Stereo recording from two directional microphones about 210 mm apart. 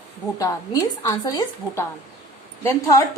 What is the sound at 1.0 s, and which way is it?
A woman's voice, 15° left (ahead or behind).